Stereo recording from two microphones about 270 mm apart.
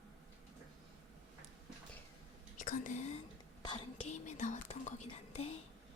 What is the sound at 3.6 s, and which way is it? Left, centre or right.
Whispering, centre.